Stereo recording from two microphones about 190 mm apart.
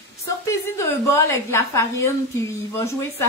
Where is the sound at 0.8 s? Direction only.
15° left (ahead or behind).